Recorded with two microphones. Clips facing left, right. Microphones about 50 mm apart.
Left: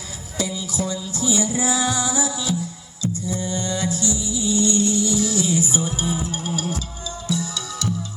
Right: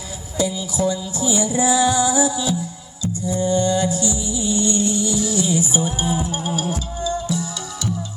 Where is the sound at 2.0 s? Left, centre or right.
Right.